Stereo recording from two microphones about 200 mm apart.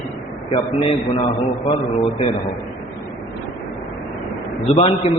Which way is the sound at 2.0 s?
30° left (ahead or behind).